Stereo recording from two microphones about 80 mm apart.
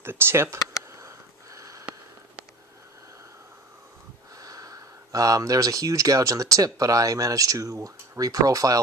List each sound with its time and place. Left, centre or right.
0.0 s speech: right
0.9 s wheeze: right
4.4 s speech: right